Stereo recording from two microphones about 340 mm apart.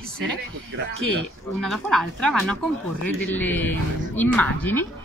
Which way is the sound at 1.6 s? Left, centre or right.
Centre.